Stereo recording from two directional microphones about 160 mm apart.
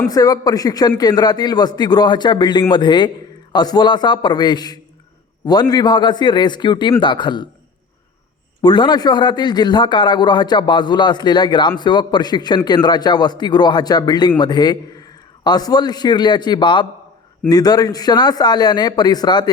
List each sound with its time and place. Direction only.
0.1 s a man's voice: 25° left (ahead or behind)
8.6 s a man's voice: 30° left (ahead or behind)